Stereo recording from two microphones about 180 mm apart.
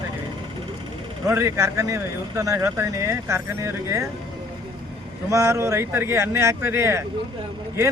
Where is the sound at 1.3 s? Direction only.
15° right (ahead or behind).